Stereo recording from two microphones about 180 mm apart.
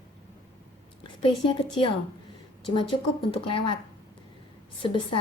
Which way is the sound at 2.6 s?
30° left (ahead or behind).